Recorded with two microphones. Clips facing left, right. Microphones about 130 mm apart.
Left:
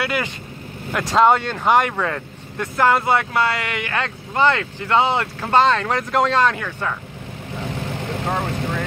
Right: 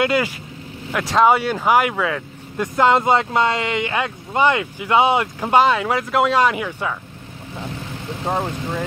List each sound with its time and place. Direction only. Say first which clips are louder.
0.0 s speech: right 5 dB; 20° right (ahead or behind)
0.9 s speech: even; 5° right (ahead or behind)
2.5 s speech: right 2 dB; 20° right (ahead or behind)
8.3 s speech: right 2 dB; 10° right (ahead or behind)